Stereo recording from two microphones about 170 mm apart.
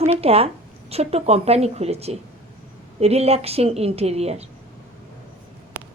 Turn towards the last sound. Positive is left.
turn(degrees=-40)  # may be behind; listen again after turning